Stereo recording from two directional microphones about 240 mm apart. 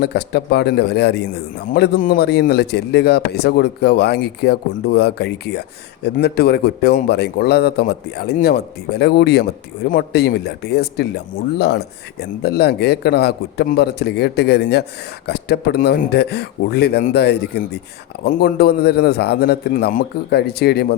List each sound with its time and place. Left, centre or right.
0.0 s a man's voice: left